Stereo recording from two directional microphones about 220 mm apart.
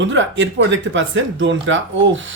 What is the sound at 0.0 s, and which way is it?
Speech, 55° right (ahead or behind).